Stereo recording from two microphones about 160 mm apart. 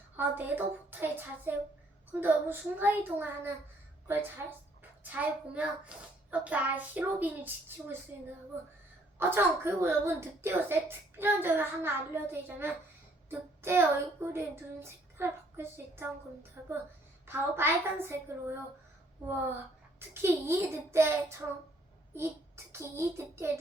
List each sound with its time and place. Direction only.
0.2 s a woman's voice: 10° right (ahead or behind)
9.1 s a woman's voice: 15° right (ahead or behind)
20.0 s a woman's voice: 15° right (ahead or behind)